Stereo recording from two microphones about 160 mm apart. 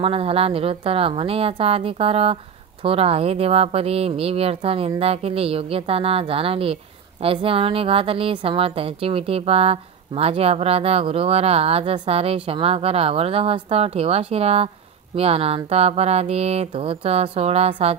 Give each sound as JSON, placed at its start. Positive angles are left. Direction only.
{"t": 0.0, "sound": "speech", "side_deg": -35}